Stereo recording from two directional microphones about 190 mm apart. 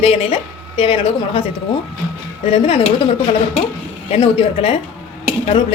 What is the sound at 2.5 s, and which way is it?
Speech, 30° left (ahead or behind).